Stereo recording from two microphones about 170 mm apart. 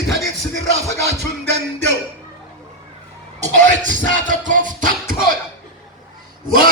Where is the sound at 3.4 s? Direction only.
50° right (ahead or behind).